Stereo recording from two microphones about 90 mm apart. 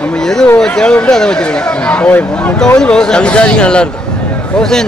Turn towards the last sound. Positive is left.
turn(degrees=5)  # may be behind; listen again after turning